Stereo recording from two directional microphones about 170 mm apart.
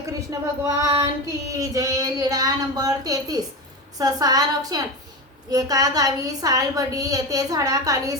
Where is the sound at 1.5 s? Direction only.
20° right (ahead or behind).